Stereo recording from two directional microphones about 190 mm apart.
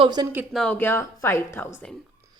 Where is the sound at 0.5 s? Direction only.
5° left (ahead or behind).